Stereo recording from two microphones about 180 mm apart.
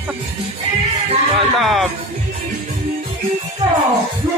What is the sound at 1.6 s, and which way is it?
Speech, centre (ahead or behind).